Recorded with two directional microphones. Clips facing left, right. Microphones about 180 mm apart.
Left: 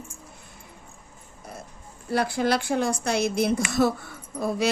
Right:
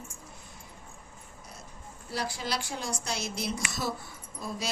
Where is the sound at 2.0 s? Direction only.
55° left (ahead or behind).